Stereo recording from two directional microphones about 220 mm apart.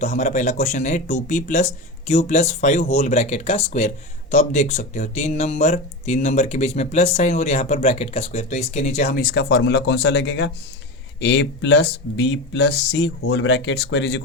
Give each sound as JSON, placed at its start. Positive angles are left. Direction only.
{"t": 0.0, "sound": "speech", "side_deg": 30}